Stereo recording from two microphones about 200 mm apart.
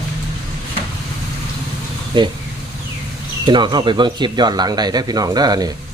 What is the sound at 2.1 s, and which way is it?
Speech, 25° right (ahead or behind).